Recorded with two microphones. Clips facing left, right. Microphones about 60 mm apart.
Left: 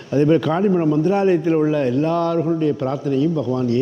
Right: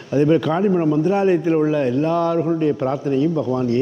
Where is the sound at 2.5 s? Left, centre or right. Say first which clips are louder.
Right 1 dB; right.